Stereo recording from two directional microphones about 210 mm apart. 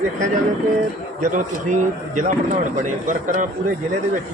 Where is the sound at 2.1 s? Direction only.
35° right (ahead or behind).